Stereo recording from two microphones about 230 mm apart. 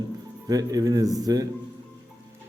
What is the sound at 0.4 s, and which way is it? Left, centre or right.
A man's voice, centre.